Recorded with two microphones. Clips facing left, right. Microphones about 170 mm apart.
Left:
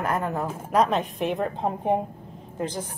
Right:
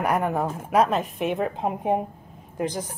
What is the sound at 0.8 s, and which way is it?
A woman's voice, centre (ahead or behind).